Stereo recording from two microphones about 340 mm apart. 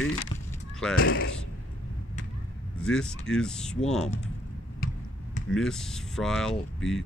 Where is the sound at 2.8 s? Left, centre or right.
Centre.